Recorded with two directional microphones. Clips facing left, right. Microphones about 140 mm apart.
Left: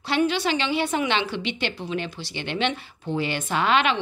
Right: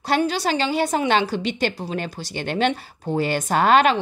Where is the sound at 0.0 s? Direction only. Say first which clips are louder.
Right 2 dB; 40° right (ahead or behind).